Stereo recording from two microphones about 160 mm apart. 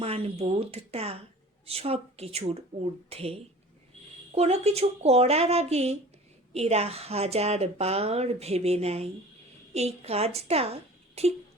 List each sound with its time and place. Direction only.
0.0 s a woman's voice: 40° right (ahead or behind)